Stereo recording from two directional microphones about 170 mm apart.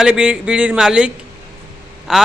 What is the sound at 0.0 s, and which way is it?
A man's voice, 5° right (ahead or behind).